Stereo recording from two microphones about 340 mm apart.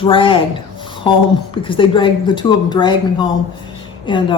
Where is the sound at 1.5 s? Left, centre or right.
Centre.